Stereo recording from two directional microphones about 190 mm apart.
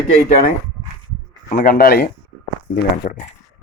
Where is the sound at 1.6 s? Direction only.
50° left (ahead or behind).